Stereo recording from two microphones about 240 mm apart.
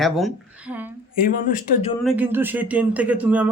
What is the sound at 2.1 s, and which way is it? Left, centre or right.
Speech, centre.